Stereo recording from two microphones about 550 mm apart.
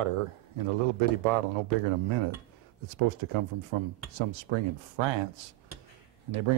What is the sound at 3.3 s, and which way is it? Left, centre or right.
Speech, right.